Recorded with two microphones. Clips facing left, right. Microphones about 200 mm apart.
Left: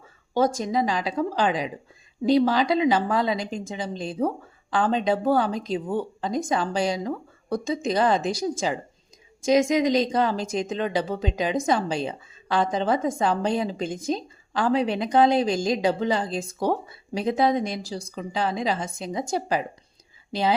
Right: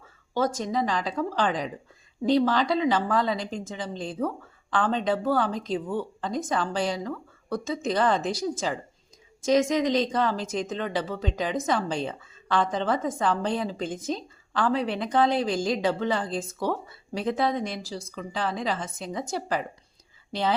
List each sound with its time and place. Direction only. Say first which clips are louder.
0.3 s a woman's voice: left 3 dB; 15° left (ahead or behind)